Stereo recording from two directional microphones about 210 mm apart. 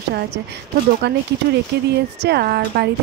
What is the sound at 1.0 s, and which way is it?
Speech, 55° right (ahead or behind).